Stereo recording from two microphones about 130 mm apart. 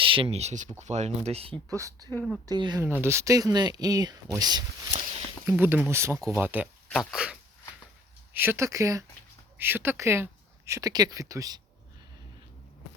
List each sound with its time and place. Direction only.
0.0 s speech: 45° right (ahead or behind)
1.7 s speech: 25° right (ahead or behind)
2.8 s speech: 20° right (ahead or behind)
5.5 s speech: 15° right (ahead or behind)
6.8 s speech: centre (ahead or behind)
8.3 s speech: 15° right (ahead or behind)